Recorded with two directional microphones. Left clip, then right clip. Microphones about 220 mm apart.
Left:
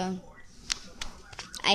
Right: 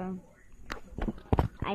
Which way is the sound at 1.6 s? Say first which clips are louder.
Left 9 dB; 5° left (ahead or behind).